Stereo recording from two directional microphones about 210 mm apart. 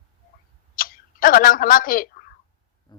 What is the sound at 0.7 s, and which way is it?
Tick-tock, 40° left (ahead or behind).